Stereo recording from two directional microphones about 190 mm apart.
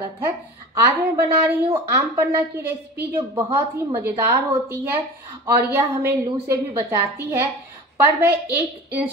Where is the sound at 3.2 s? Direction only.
30° right (ahead or behind).